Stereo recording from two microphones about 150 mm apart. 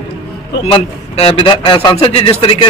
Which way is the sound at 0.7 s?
40° left (ahead or behind).